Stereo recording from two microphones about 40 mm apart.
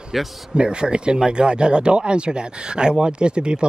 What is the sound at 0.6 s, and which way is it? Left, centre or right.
Speech, right.